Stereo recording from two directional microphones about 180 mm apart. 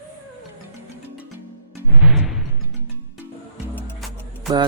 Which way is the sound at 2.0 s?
5° right (ahead or behind).